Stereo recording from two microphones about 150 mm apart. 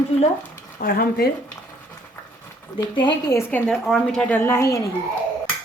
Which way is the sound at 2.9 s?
30° left (ahead or behind).